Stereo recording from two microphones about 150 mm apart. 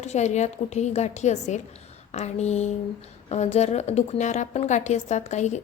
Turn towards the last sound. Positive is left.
turn(degrees=50)  # may be behind; listen again after turning